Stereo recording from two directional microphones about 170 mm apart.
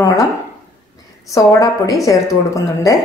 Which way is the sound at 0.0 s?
20° left (ahead or behind).